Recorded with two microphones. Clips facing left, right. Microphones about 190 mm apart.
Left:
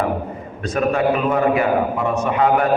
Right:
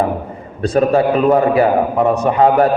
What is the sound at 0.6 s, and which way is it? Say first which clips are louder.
A man's voice: right 5 dB; 30° right (ahead or behind).